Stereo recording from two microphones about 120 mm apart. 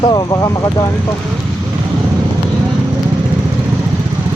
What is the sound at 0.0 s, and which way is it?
Speech, 40° left (ahead or behind).